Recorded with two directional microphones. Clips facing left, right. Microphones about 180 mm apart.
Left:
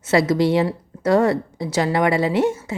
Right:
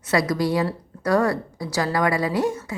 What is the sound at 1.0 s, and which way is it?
A woman's voice, 25° left (ahead or behind).